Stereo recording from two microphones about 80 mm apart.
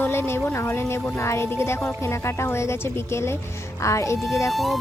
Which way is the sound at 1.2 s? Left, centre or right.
Left.